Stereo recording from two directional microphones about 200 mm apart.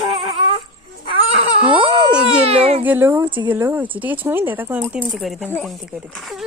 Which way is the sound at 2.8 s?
10° right (ahead or behind).